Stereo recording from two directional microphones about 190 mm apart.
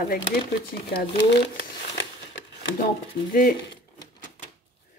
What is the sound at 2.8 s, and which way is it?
Speech, 45° left (ahead or behind).